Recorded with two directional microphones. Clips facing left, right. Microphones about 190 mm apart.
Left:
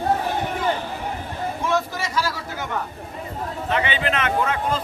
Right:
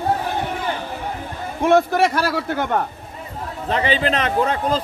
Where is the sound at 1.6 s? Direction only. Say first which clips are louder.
Right 11 dB; 60° right (ahead or behind).